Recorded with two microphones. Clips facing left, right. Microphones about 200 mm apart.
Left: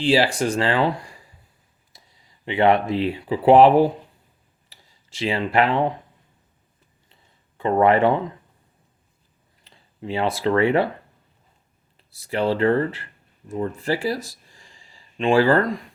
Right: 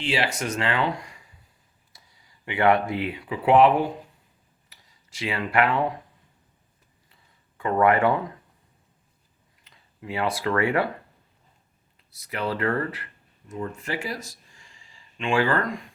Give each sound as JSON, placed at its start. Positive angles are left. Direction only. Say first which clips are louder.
{"t": 0.0, "sound": "speech", "louder": "left 8 dB", "side_deg": 35}
{"t": 7.6, "sound": "speech", "louder": "left 3 dB", "side_deg": 25}
{"t": 9.6, "sound": "speech", "louder": "left 5 dB", "side_deg": 30}
{"t": 12.1, "sound": "speech", "louder": "left 7 dB", "side_deg": 30}